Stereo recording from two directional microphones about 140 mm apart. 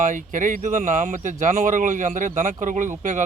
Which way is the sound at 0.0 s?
65° right (ahead or behind).